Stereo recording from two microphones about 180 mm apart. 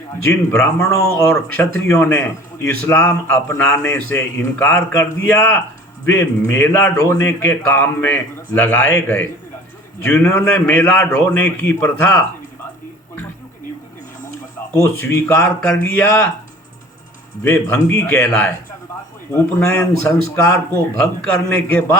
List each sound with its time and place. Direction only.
0.3 s a man's voice: 15° left (ahead or behind)
14.8 s a man's voice: 15° left (ahead or behind)
17.4 s a man's voice: 10° left (ahead or behind)